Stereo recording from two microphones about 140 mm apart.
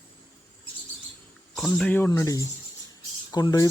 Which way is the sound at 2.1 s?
25° left (ahead or behind).